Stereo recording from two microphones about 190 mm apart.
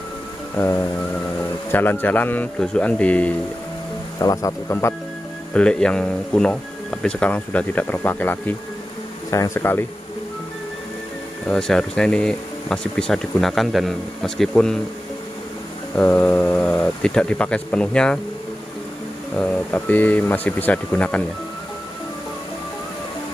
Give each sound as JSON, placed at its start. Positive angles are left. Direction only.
{"t": 0.6, "sound": "speech", "side_deg": 10}
{"t": 4.2, "sound": "speech", "side_deg": 20}
{"t": 11.4, "sound": "speech", "side_deg": 5}
{"t": 16.0, "sound": "speech", "side_deg": 10}
{"t": 19.3, "sound": "speech", "side_deg": 5}